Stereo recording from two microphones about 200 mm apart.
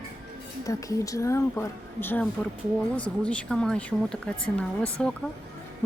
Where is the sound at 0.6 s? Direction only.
15° left (ahead or behind).